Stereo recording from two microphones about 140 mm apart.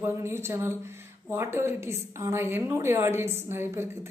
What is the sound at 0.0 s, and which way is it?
Speech, 20° right (ahead or behind).